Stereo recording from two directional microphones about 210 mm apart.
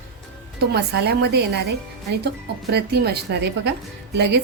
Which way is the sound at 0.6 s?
50° right (ahead or behind).